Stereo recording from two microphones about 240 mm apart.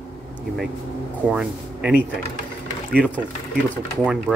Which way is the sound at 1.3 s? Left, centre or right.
Centre.